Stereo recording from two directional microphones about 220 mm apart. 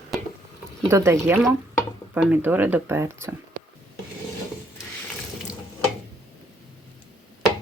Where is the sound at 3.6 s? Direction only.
40° right (ahead or behind).